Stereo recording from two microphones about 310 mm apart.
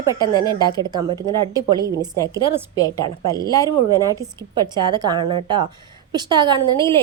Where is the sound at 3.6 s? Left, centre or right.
Centre.